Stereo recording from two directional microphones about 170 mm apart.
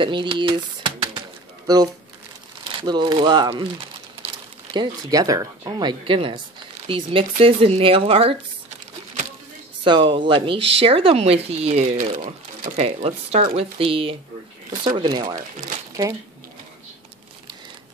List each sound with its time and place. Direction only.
0.0 s speech: 30° right (ahead or behind)
2.8 s speech: 25° right (ahead or behind)
9.8 s speech: 30° right (ahead or behind)